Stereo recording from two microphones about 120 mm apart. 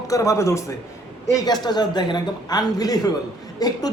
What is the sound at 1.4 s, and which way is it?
Speech, 35° left (ahead or behind).